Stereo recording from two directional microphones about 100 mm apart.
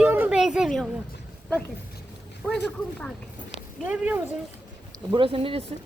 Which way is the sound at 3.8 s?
15° right (ahead or behind).